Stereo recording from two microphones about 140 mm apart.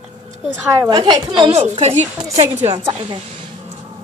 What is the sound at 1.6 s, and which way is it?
Speech, 55° right (ahead or behind).